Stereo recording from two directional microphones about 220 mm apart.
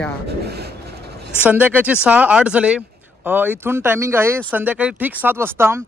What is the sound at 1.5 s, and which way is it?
A man's voice, 10° right (ahead or behind).